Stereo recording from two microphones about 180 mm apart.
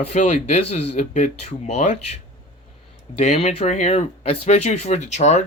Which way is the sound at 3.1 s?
35° left (ahead or behind).